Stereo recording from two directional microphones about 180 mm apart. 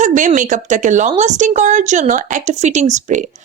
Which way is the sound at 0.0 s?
45° right (ahead or behind).